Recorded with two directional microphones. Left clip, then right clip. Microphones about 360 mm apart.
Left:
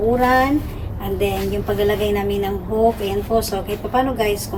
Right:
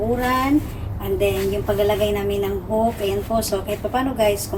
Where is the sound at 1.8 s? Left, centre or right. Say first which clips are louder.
Left 1 dB; centre.